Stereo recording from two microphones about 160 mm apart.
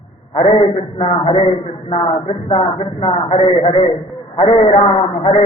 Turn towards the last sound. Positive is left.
turn(degrees=30)  # may be behind; listen again after turning